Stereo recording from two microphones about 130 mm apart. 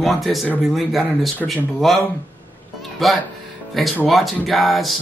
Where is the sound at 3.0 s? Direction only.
Centre (ahead or behind).